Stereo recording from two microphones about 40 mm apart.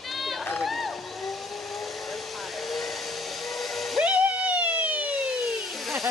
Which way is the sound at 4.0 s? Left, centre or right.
Right.